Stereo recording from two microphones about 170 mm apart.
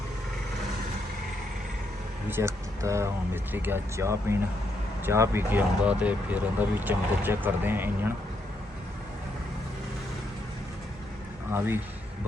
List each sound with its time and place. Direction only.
2.3 s speech: 15° right (ahead or behind)
11.5 s speech: 15° right (ahead or behind)